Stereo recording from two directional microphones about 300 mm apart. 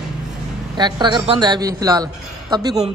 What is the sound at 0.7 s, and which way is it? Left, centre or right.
Speech, centre.